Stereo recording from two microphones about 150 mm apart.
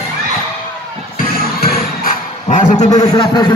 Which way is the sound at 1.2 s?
80° left.